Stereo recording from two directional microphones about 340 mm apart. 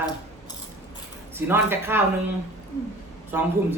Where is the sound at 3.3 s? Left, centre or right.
Centre.